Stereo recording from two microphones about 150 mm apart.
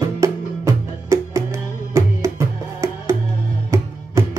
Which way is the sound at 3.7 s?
20° right (ahead or behind).